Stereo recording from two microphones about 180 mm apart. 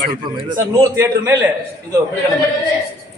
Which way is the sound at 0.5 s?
15° right (ahead or behind).